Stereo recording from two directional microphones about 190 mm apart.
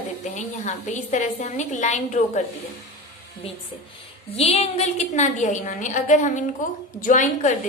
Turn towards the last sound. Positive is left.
turn(degrees=40)  # may be behind; listen again after turning